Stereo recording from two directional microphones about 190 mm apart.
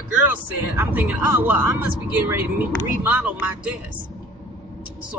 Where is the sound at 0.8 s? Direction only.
10° right (ahead or behind).